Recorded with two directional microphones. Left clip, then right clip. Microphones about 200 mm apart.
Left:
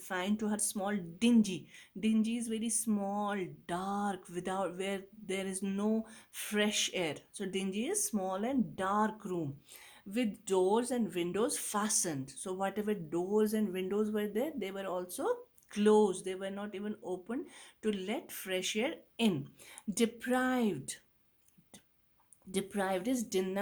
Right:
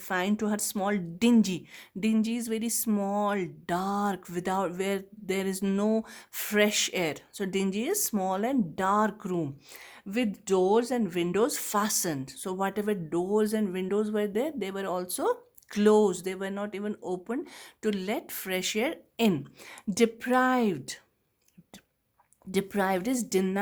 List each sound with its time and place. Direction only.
0.1 s speech: 40° right (ahead or behind)
22.5 s speech: 45° right (ahead or behind)